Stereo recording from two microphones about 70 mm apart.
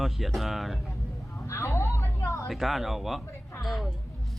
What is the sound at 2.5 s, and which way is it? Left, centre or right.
Speech, centre.